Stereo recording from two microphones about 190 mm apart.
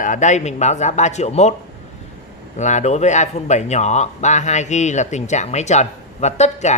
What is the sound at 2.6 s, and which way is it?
Speech, 40° left (ahead or behind).